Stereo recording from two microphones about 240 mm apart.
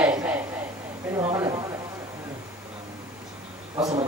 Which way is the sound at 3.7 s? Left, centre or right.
Centre.